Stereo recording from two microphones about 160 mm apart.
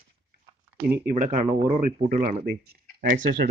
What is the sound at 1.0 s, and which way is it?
Speech, 60° right (ahead or behind).